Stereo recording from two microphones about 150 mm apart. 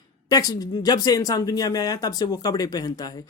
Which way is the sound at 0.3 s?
25° left (ahead or behind).